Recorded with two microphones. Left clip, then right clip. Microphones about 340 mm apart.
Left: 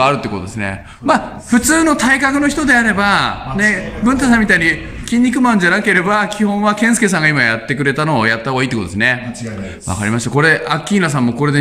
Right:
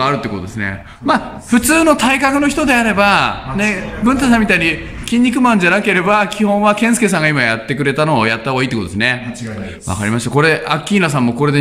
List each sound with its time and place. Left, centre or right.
0.0 s a man's voice: centre